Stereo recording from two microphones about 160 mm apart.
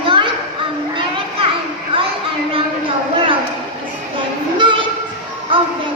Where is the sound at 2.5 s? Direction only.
35° right (ahead or behind).